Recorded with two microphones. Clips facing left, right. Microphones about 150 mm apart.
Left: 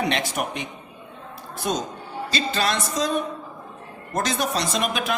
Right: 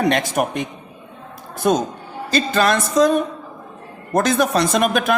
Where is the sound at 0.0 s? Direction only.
45° right (ahead or behind).